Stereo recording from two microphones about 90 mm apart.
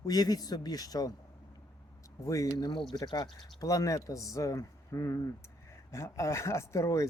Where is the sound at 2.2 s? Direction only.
40° left (ahead or behind).